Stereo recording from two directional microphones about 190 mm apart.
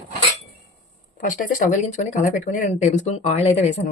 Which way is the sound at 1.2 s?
45° left (ahead or behind).